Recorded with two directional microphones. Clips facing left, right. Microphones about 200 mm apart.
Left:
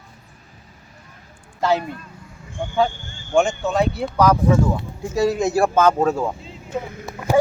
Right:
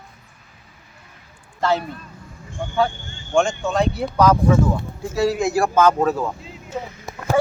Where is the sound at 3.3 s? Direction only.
5° left (ahead or behind).